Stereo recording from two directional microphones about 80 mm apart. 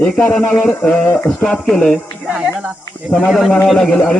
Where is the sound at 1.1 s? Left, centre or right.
Left.